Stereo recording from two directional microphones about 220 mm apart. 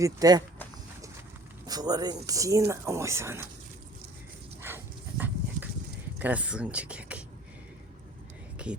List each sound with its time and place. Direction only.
0.0 s speech: 15° right (ahead or behind)
1.6 s speech: 15° right (ahead or behind)
4.6 s dog: 10° right (ahead or behind)
6.1 s speech: 5° right (ahead or behind)
8.6 s speech: 5° right (ahead or behind)